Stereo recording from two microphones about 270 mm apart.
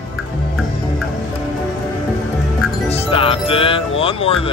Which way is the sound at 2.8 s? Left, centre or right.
Left.